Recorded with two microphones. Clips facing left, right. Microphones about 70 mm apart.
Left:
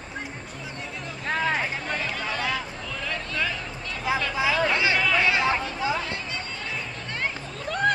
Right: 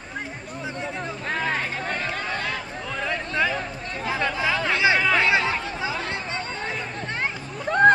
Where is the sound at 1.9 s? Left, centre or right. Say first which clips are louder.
Right 1 dB; right.